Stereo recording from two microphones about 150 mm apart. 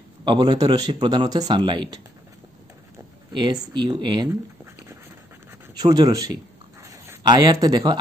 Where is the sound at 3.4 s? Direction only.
30° right (ahead or behind).